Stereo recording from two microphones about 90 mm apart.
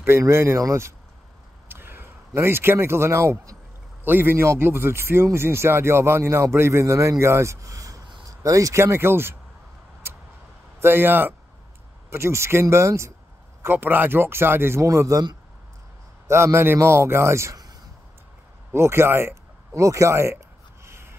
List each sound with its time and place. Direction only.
0.2 s a man's voice: 30° right (ahead or behind)
10.8 s speech: 25° right (ahead or behind)
16.3 s speech: 30° right (ahead or behind)
18.7 s a sound: 30° right (ahead or behind)